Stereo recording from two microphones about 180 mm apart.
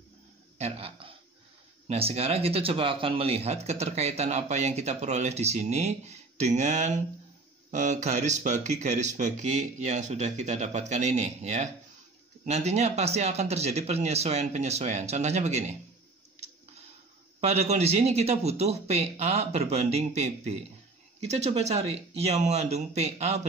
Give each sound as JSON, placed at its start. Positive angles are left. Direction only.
{"t": 0.6, "sound": "a sound", "side_deg": -35}
{"t": 1.9, "sound": "speech", "side_deg": -35}
{"t": 17.4, "sound": "speech", "side_deg": -35}